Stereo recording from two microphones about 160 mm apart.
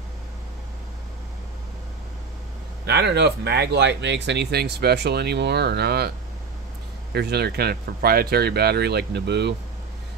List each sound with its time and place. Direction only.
2.9 s speech: 90° right